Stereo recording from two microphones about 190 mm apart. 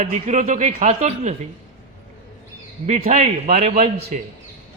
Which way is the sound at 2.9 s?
40° right (ahead or behind).